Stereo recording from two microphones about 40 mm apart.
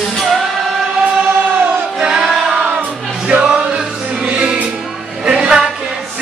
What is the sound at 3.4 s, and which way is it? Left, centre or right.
Music, right.